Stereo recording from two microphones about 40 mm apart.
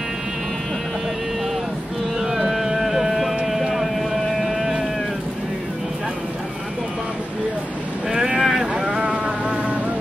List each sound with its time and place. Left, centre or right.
2.1 s music: centre
4.5 s a sound: centre
8.1 s boat: centre
8.4 s boat: centre
8.7 s a sound: centre
9.1 s insect: right